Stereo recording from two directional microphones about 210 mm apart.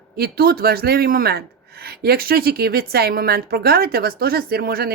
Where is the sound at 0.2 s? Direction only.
45° right (ahead or behind).